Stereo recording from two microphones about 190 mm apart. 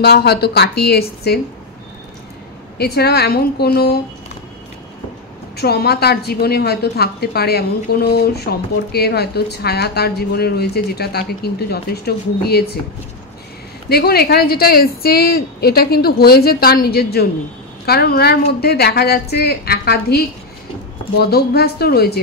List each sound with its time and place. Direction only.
0.0 s a woman's voice: 60° left (ahead or behind)
2.8 s a woman's voice: 55° left (ahead or behind)
5.6 s a woman's voice: 55° left (ahead or behind)
13.8 s a woman's voice: 55° left (ahead or behind)
21.2 s a woman's voice: 55° left (ahead or behind)